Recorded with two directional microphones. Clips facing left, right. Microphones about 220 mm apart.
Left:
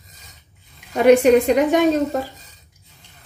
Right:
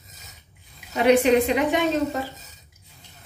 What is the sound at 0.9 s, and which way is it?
Speech, 45° left (ahead or behind).